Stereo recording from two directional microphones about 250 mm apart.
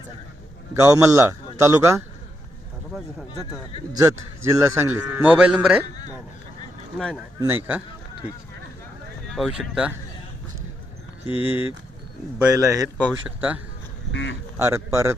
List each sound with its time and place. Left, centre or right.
0.7 s speech: centre
3.9 s speech: centre
7.3 s speech: centre
9.3 s speech: centre
11.3 s speech: left
12.4 s speech: centre
14.1 s speech: left
14.6 s speech: centre